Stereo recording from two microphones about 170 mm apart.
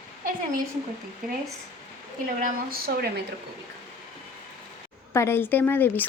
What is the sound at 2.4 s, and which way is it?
Speech, 60° right (ahead or behind).